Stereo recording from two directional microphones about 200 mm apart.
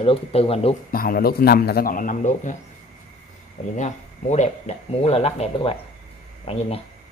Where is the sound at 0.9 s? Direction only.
45° left (ahead or behind).